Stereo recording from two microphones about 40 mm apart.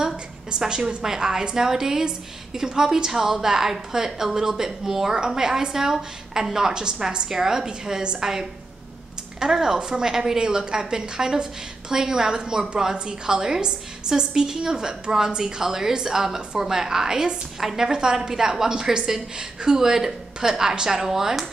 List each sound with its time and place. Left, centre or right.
0.0 s a woman's voice: centre
17.9 s a woman's voice: centre